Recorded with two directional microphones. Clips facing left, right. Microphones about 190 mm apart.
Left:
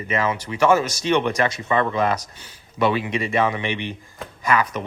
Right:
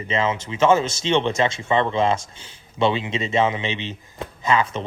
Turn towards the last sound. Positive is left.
turn(degrees=-25)  # may be behind; listen again after turning